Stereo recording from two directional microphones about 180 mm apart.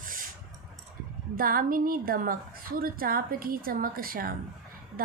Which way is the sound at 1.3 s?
50° right (ahead or behind).